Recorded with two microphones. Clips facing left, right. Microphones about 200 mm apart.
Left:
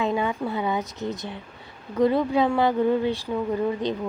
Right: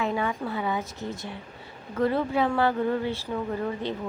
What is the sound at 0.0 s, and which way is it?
Speech, 20° left (ahead or behind).